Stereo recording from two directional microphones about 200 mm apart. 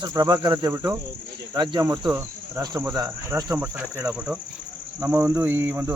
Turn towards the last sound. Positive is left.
turn(degrees=-10)  # may be behind; listen again after turning